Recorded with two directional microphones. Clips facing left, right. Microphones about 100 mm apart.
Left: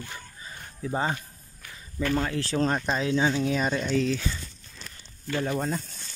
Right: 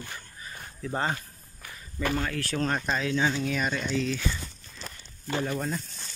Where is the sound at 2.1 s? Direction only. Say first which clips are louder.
Left 3 dB; 25° left (ahead or behind).